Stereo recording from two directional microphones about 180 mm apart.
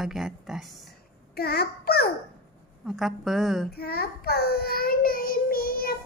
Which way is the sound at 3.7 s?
60° left (ahead or behind).